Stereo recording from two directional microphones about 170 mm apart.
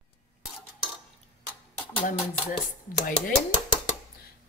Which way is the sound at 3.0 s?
50° left (ahead or behind).